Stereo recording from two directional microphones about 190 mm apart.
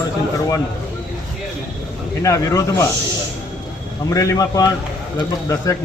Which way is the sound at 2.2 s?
15° left (ahead or behind).